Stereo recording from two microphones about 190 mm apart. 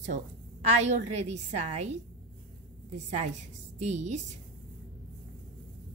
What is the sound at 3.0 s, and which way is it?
A woman's voice, 40° right (ahead or behind).